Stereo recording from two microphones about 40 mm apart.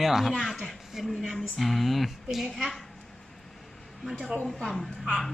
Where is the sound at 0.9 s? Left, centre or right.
Centre.